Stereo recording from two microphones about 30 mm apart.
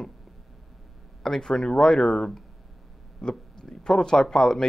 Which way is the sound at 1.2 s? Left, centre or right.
Centre.